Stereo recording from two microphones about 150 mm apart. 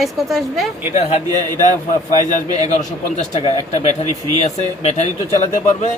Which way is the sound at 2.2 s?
50° left (ahead or behind).